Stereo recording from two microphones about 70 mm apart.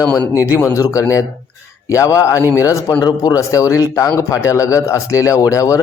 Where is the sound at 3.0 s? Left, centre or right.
Left.